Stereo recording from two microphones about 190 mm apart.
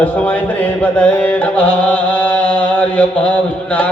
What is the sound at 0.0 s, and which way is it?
Music, 10° left (ahead or behind).